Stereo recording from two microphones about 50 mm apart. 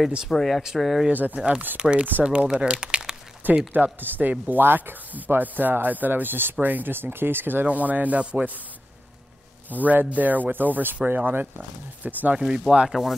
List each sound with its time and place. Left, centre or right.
0.3 s speech: centre
0.6 s speech: centre
1.1 s speech: right
1.8 s rub: right
2.2 s speech: centre
3.4 s speech: right
7.6 s rub: right
9.7 s speech: right
12.4 s speech: centre